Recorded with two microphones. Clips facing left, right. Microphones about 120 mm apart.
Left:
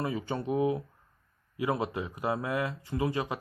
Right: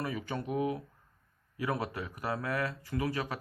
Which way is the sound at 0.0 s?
25° left (ahead or behind).